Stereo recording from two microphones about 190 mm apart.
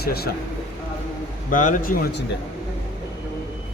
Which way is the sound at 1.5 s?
40° left (ahead or behind).